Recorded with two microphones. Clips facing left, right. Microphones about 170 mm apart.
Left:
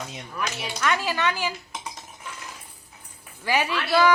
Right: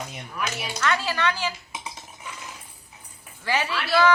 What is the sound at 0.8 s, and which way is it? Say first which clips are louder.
Speech: even; 15° left (ahead or behind).